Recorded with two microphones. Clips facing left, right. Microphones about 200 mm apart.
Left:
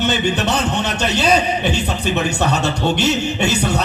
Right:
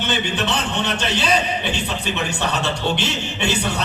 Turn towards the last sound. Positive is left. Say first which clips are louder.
# left 4 dB
turn(degrees=40)  # may be behind; listen again after turning